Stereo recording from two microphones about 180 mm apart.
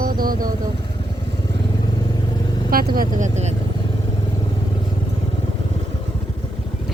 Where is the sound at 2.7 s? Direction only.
55° right (ahead or behind).